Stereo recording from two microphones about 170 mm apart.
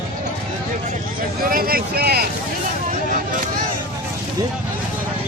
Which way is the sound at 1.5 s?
60° right (ahead or behind).